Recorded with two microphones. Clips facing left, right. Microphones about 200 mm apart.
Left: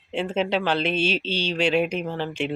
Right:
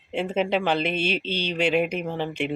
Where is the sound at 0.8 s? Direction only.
55° right (ahead or behind).